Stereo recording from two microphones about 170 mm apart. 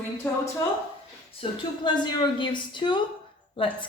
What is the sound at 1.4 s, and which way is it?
A woman's voice, 25° left (ahead or behind).